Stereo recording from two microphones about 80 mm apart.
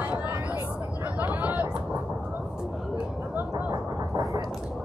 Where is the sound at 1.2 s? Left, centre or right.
Right.